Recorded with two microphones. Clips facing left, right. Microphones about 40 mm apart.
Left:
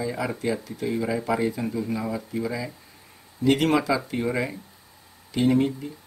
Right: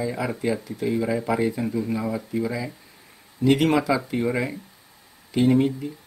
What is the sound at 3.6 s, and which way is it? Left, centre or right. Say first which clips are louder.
Speech: right 1 dB; right.